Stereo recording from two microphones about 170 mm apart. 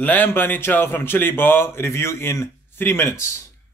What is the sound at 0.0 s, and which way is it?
Speech, 10° left (ahead or behind).